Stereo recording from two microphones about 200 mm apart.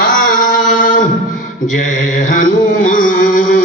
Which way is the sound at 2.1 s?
40° left (ahead or behind).